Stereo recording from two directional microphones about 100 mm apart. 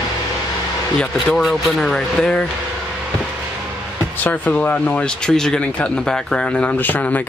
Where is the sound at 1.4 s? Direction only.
Centre (ahead or behind).